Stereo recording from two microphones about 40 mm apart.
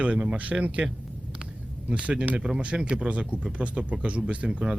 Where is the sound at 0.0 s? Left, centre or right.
Right.